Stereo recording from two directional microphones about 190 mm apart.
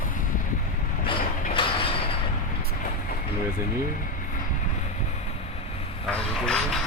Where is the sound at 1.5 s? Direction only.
30° left (ahead or behind).